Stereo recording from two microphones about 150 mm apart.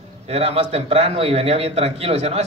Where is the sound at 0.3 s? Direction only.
40° right (ahead or behind).